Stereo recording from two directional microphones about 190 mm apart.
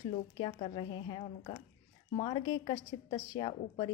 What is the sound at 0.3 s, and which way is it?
A woman's voice, 30° left (ahead or behind).